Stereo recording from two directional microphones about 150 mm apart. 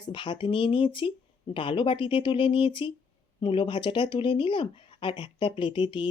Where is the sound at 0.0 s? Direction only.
30° left (ahead or behind).